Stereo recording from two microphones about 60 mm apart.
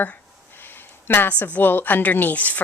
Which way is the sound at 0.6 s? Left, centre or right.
Left.